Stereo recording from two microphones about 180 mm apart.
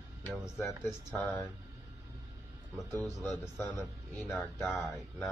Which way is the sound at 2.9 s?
10° left (ahead or behind).